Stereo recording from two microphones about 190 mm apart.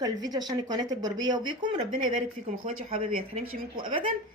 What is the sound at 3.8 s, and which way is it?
Speech, 25° right (ahead or behind).